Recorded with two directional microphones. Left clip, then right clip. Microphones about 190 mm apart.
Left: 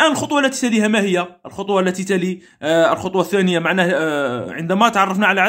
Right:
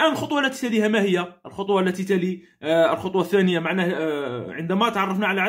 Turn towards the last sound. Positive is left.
turn(degrees=30)  # may be behind; listen again after turning